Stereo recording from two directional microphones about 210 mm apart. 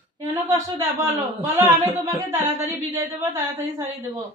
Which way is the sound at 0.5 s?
10° right (ahead or behind).